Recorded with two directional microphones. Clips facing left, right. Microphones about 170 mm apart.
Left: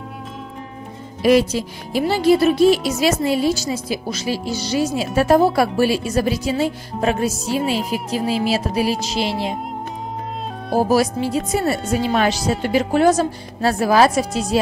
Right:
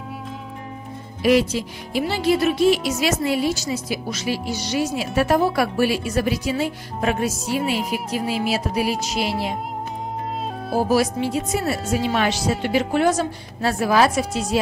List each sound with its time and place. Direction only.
1.2 s speech: 35° left (ahead or behind)
10.9 s speech: 40° left (ahead or behind)